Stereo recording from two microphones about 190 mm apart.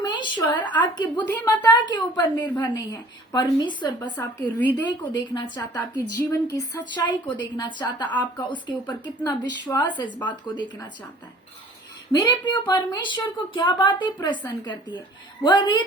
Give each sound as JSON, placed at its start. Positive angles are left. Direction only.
{"t": 0.0, "sound": "a sound", "side_deg": 25}
{"t": 0.9, "sound": "a woman's voice", "side_deg": 20}
{"t": 5.7, "sound": "a woman's voice", "side_deg": 10}
{"t": 12.1, "sound": "a woman's voice", "side_deg": 25}